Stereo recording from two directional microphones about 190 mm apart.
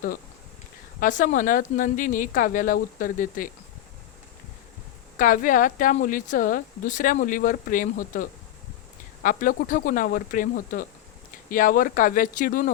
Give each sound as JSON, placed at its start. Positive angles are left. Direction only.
{"t": 0.9, "sound": "a woman's voice", "side_deg": 45}
{"t": 5.1, "sound": "a woman's voice", "side_deg": 45}